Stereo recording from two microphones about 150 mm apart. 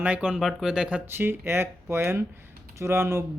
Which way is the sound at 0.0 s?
10° right (ahead or behind).